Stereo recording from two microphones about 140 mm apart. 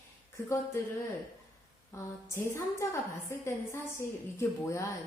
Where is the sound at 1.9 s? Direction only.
20° left (ahead or behind).